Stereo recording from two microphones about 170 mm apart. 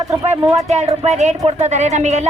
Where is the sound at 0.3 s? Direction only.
40° right (ahead or behind).